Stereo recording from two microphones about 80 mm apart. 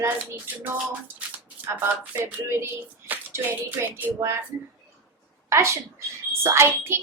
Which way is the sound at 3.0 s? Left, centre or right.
Right.